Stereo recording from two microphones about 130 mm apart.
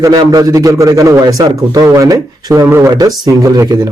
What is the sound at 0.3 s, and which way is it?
Speech, 25° right (ahead or behind).